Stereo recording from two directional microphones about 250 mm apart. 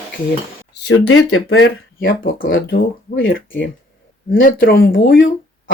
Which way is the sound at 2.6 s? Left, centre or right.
Left.